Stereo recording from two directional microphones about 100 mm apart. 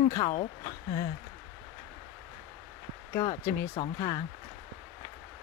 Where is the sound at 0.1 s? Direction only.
40° left (ahead or behind).